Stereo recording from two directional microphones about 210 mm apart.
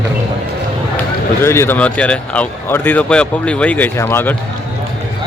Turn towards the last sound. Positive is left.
turn(degrees=10)  # may be behind; listen again after turning